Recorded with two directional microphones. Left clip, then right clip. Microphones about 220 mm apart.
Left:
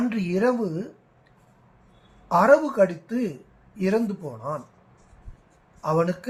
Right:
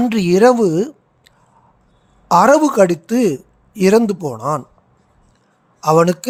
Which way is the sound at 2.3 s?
55° right (ahead or behind).